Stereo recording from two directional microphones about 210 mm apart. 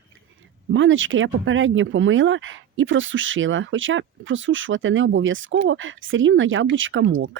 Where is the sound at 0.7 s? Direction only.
65° right (ahead or behind).